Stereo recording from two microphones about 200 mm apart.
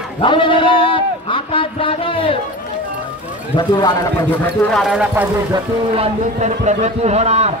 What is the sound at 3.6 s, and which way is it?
Speech, 20° left (ahead or behind).